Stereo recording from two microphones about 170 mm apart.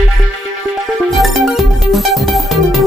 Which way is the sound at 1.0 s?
Centre (ahead or behind).